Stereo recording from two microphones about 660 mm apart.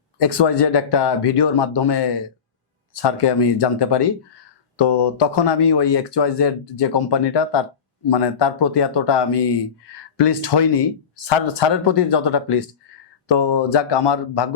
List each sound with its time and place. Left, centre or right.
0.2 s speech: left